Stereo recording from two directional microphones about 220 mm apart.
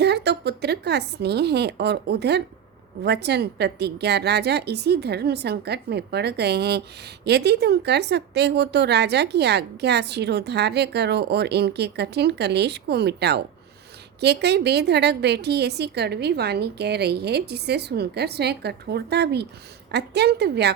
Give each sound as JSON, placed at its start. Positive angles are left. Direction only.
{"t": 0.0, "sound": "a woman's voice", "side_deg": -50}